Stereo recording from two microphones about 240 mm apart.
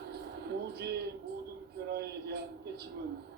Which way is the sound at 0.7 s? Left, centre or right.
Right.